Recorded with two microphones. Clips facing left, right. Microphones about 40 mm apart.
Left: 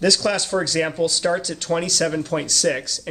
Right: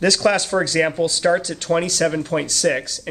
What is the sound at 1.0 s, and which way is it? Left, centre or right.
Speech, right.